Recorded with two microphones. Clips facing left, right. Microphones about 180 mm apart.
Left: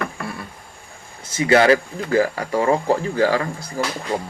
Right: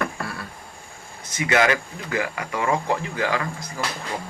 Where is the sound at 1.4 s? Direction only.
30° left (ahead or behind).